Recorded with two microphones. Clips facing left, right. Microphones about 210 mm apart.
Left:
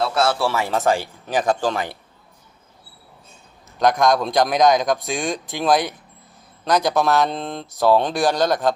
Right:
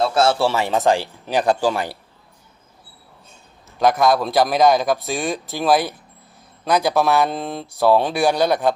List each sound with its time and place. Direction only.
0.0 s speech: 25° right (ahead or behind); by 1.8 s 10° right (ahead or behind)
3.7 s a man's voice: 5° right (ahead or behind)